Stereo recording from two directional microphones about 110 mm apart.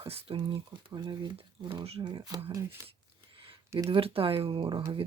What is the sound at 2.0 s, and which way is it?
Speech, 40° right (ahead or behind).